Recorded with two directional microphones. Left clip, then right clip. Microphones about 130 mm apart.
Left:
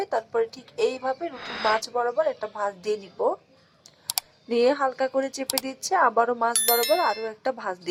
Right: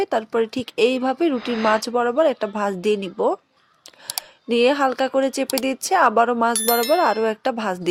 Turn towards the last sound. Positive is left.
turn(degrees=-45)  # may be behind; listen again after turning